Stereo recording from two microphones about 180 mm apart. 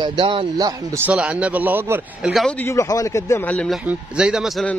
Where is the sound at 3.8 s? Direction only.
5° right (ahead or behind).